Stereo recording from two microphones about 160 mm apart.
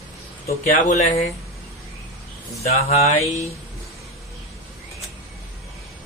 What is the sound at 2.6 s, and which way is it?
Speech, 40° left (ahead or behind).